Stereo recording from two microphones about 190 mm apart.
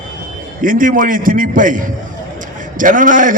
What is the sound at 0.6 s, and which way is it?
A man's voice, 45° right (ahead or behind).